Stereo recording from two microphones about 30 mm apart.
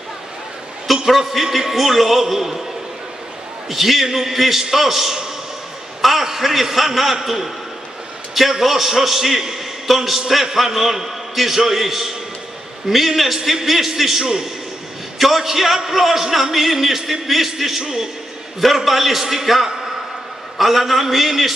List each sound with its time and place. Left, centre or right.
1.0 s a man's voice: centre
3.7 s a man's voice: centre
8.4 s a man's voice: centre
18.9 s a man's voice: centre